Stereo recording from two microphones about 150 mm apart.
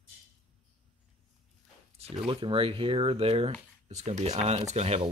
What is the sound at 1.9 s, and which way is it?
Speech, 40° right (ahead or behind).